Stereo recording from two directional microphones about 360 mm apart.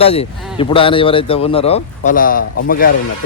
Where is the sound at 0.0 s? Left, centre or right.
Centre.